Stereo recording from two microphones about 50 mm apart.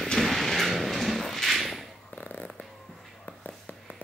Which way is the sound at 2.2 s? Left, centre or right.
Left.